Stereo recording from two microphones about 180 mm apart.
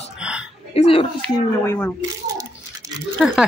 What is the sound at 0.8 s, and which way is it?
Speech, 30° left (ahead or behind).